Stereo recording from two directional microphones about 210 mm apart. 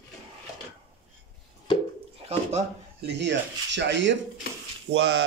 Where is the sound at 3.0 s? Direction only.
55° right (ahead or behind).